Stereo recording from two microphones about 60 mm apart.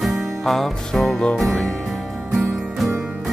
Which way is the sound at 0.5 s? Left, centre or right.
Centre.